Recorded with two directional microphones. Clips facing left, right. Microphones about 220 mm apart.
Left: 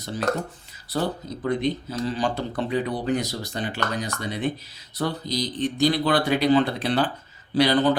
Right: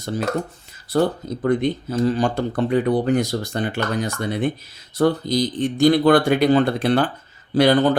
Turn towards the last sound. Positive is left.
turn(degrees=-50)  # may be behind; listen again after turning